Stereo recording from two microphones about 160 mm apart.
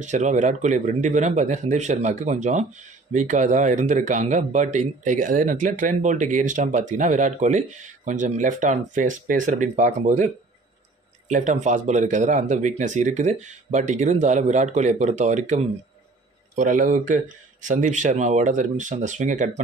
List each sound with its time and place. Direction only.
0.0 s speech: 50° right (ahead or behind)